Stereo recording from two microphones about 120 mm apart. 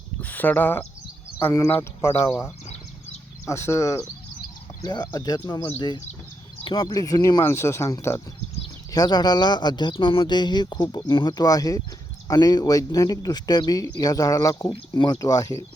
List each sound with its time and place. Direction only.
0.2 s speech: 15° left (ahead or behind)
3.4 s speech: 25° left (ahead or behind)
6.7 s speech: 35° left (ahead or behind)
14.7 s speech: 40° left (ahead or behind)